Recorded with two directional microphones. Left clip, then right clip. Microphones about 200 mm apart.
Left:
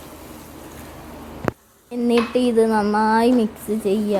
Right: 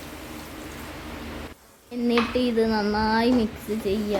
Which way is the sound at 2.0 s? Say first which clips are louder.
Left 5 dB; 20° left (ahead or behind).